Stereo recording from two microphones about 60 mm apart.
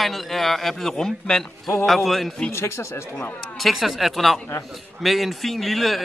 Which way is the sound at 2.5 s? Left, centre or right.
Left.